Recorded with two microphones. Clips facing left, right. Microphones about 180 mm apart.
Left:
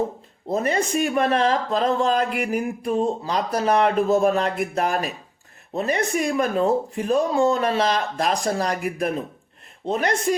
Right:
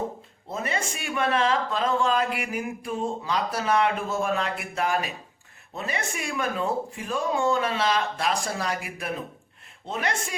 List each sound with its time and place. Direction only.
0.4 s speech: 40° left (ahead or behind)